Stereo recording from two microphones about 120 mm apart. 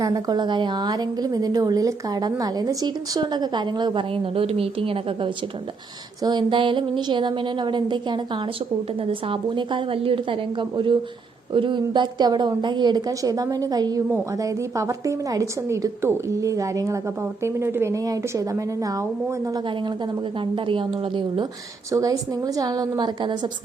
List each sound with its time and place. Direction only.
0.0 s a woman's voice: 35° right (ahead or behind)
20.4 s a woman's voice: 45° right (ahead or behind)
21.9 s a woman's voice: 30° right (ahead or behind)